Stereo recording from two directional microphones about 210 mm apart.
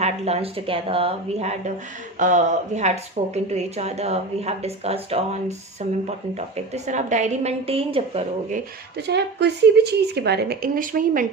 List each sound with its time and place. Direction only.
0.0 s a woman's voice: 30° right (ahead or behind)
9.0 s speech: 55° right (ahead or behind)